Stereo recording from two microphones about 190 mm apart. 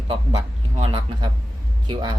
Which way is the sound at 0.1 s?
25° right (ahead or behind).